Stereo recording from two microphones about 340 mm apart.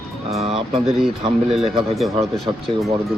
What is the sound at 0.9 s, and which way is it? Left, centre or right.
Speech, centre.